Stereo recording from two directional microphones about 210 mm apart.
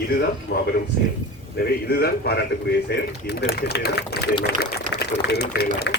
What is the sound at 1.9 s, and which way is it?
Speech, 50° left (ahead or behind).